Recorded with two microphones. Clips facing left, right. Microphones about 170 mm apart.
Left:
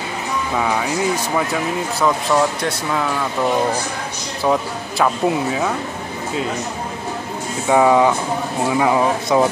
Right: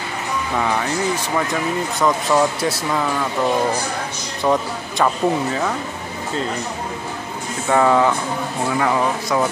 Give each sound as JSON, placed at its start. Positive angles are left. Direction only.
{"t": 0.6, "sound": "speech", "side_deg": 5}
{"t": 4.4, "sound": "speech", "side_deg": 5}
{"t": 7.6, "sound": "speech", "side_deg": 10}